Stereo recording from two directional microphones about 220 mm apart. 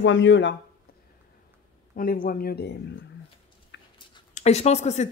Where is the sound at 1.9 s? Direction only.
40° left (ahead or behind).